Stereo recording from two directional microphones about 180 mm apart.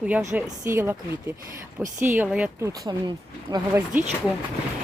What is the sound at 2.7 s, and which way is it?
Speech, 20° right (ahead or behind).